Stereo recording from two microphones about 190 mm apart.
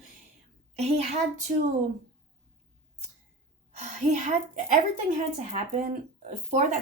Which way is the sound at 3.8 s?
40° right (ahead or behind).